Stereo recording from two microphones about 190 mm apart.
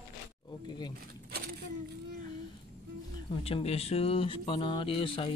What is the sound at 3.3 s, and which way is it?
Speech, 30° left (ahead or behind).